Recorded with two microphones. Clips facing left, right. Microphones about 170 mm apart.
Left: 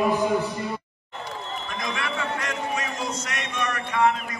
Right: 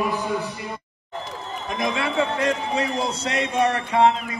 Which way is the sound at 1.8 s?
30° right (ahead or behind).